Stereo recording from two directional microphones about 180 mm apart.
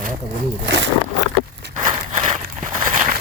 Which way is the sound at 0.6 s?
75° right (ahead or behind).